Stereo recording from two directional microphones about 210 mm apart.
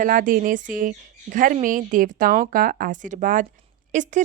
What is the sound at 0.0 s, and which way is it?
A woman's voice, 40° right (ahead or behind).